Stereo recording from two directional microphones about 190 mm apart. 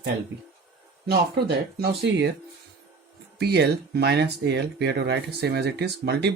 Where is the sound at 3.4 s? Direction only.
60° right (ahead or behind).